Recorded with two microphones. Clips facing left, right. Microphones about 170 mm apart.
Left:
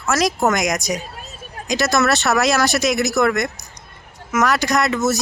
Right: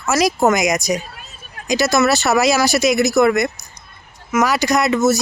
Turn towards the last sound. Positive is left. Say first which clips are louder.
# right 3 dB
turn(degrees=0)  # may be behind; listen again after turning